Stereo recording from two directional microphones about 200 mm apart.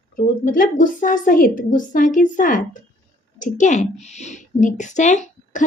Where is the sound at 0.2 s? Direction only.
45° left (ahead or behind).